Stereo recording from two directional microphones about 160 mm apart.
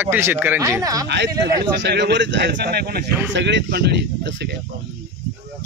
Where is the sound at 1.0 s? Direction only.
90° right.